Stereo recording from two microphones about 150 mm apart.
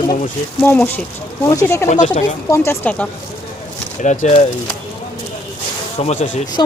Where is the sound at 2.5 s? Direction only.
20° left (ahead or behind).